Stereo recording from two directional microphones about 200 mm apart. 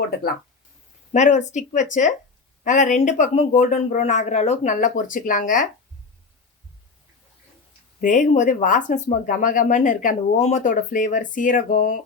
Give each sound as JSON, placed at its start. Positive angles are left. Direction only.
{"t": 1.1, "sound": "speech", "side_deg": 35}
{"t": 8.0, "sound": "speech", "side_deg": 40}